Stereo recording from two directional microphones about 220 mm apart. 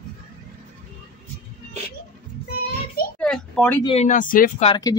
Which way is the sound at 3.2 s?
5° left (ahead or behind).